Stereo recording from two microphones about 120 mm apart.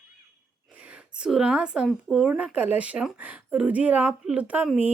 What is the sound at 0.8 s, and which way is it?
Speech, 10° right (ahead or behind).